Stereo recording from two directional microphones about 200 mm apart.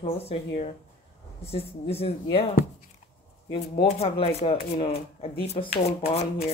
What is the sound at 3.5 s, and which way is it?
Speech, 30° left (ahead or behind).